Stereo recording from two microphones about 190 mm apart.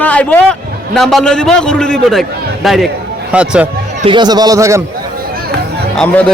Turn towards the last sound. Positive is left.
turn(degrees=10)  # may be behind; listen again after turning